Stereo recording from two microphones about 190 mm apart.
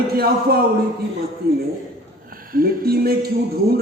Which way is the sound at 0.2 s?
55° right (ahead or behind).